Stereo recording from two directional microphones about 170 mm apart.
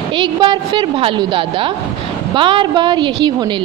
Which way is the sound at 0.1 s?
30° right (ahead or behind).